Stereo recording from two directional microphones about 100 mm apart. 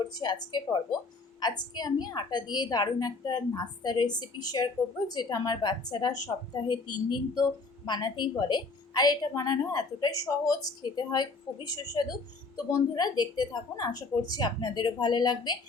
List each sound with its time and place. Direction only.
0.0 s a woman's voice: 45° left (ahead or behind)